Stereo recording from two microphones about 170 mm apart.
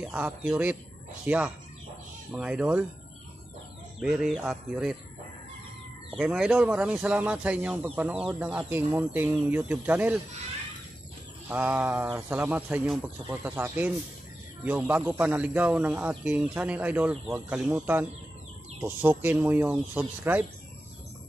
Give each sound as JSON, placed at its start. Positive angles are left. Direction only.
{"t": 0.0, "sound": "speech", "side_deg": -5}
{"t": 4.0, "sound": "bird", "side_deg": -5}
{"t": 6.1, "sound": "speech", "side_deg": -5}
{"t": 11.4, "sound": "speech", "side_deg": -10}